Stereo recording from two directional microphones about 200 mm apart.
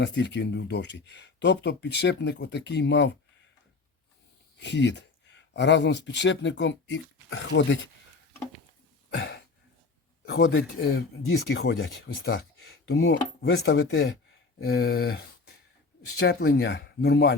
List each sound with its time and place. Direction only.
0.0 s speech: 60° left (ahead or behind)
4.6 s speech: 60° left (ahead or behind)
9.0 s a sound: 60° left (ahead or behind)
10.8 s speech: 50° left (ahead or behind)